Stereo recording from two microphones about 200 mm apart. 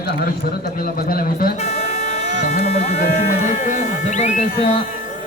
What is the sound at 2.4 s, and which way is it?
Speech, 35° left (ahead or behind).